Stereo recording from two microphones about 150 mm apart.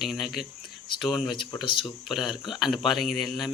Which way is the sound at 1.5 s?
35° left (ahead or behind).